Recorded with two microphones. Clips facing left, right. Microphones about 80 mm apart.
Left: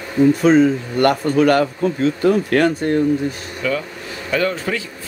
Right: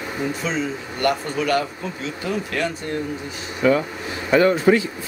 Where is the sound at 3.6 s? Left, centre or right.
Right.